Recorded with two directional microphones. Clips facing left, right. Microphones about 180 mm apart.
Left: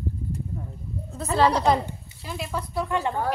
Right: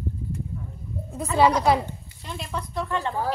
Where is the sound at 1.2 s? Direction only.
10° right (ahead or behind).